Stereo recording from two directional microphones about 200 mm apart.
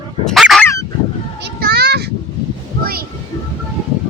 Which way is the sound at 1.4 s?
50° right (ahead or behind).